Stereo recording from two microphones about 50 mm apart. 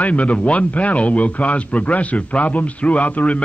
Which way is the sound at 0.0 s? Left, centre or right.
Left.